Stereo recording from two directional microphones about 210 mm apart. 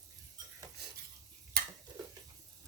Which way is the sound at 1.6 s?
45° right (ahead or behind).